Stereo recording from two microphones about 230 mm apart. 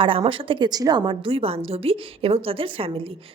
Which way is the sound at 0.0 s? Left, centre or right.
Right.